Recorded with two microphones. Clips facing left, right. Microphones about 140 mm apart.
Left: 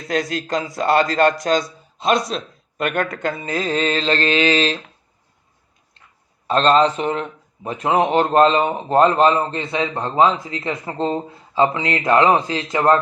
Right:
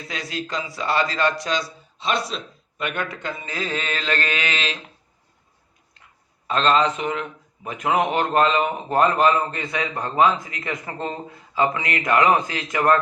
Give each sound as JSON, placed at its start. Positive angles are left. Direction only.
{"t": 0.1, "sound": "a man's voice", "side_deg": 45}
{"t": 2.7, "sound": "mantra", "side_deg": 45}
{"t": 6.5, "sound": "a man's voice", "side_deg": 35}